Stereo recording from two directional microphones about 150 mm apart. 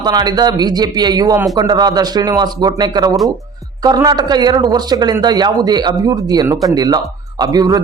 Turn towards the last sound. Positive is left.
turn(degrees=-25)  # may be behind; listen again after turning